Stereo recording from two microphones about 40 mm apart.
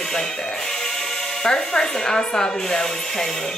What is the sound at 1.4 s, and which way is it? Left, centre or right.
Speech, centre.